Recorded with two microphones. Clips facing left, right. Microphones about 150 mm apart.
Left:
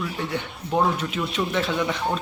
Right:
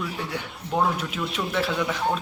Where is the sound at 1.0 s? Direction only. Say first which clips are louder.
Left 3 dB; 5° right (ahead or behind).